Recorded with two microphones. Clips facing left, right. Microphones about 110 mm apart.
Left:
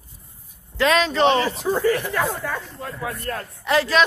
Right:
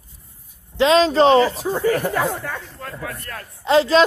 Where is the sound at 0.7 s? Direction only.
25° right (ahead or behind); by 2.2 s 40° right (ahead or behind).